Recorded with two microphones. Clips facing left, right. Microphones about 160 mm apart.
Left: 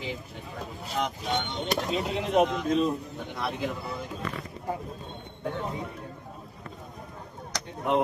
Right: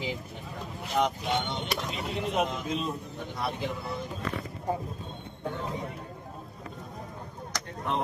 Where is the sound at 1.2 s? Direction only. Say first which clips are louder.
Left 1 dB; centre (ahead or behind).